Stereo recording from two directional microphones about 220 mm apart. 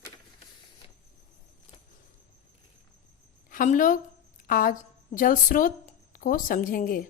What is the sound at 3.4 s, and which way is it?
A woman's voice, 35° left (ahead or behind).